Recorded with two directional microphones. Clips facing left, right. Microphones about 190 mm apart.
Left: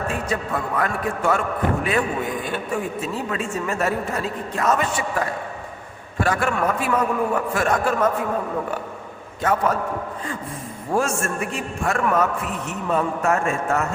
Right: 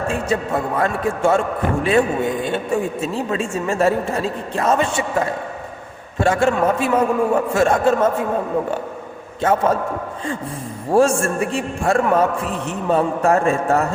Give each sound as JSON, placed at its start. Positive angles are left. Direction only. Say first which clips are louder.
{"t": 0.1, "sound": "a man's voice", "louder": "right 4 dB", "side_deg": -25}
{"t": 9.4, "sound": "a man's voice", "louder": "right 4 dB", "side_deg": -25}
{"t": 10.9, "sound": "a man's voice", "louder": "right 7 dB", "side_deg": -30}